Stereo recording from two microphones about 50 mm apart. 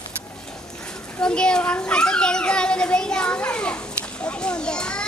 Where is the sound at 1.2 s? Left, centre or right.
Centre.